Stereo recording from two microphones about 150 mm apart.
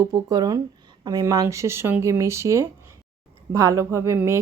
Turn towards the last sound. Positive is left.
turn(degrees=-15)  # may be behind; listen again after turning